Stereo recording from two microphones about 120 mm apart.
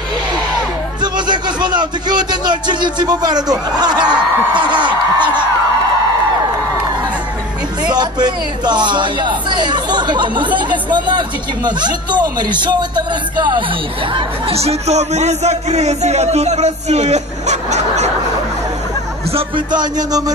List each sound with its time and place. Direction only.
1.0 s speech: 40° right (ahead or behind)
7.9 s speech: 35° right (ahead or behind)
14.5 s a man's voice: 60° right (ahead or behind)
19.3 s speech: 40° right (ahead or behind)